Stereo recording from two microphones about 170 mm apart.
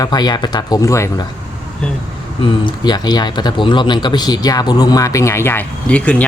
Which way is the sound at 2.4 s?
25° left (ahead or behind).